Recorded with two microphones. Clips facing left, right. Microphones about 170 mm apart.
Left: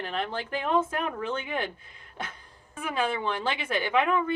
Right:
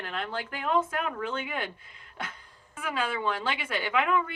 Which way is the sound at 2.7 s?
25° left (ahead or behind).